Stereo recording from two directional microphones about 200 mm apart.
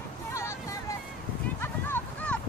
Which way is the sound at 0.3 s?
15° left (ahead or behind).